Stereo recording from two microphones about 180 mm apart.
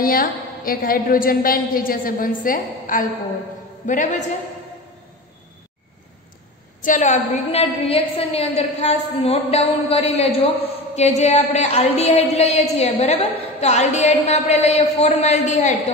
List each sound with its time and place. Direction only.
0.0 s a woman's voice: 55° left (ahead or behind)
6.8 s a woman's voice: 45° left (ahead or behind)